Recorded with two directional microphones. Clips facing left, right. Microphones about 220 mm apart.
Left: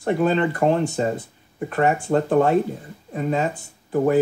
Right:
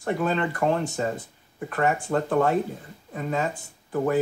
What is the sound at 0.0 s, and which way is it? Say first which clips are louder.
Speech: left 5 dB; 30° left (ahead or behind).